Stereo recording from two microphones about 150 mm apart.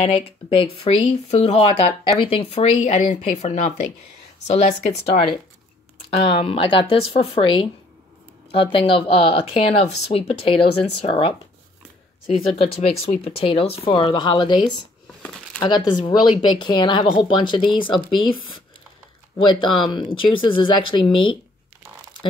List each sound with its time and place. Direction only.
0.0 s speech: 40° left (ahead or behind)
12.4 s speech: 40° left (ahead or behind)
19.5 s speech: 30° left (ahead or behind)